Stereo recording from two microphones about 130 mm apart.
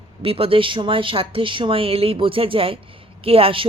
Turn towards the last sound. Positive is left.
turn(degrees=-45)  # may be behind; listen again after turning